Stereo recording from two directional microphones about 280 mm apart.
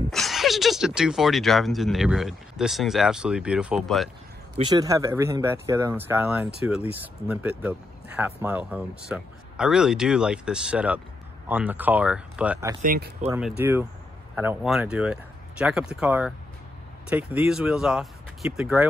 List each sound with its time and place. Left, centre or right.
0.1 s speech: centre
4.6 s speech: centre
12.8 s speech: right
13.3 s speech: centre